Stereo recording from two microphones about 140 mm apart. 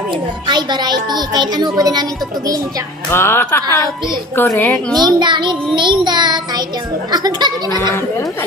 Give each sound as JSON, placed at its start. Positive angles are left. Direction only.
{"t": 0.5, "sound": "speech", "side_deg": -30}
{"t": 3.1, "sound": "speech", "side_deg": 15}
{"t": 4.9, "sound": "speech", "side_deg": -30}
{"t": 7.1, "sound": "laughter", "side_deg": -30}